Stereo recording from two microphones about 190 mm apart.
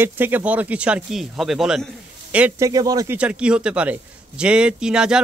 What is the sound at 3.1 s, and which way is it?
Speech, 5° right (ahead or behind).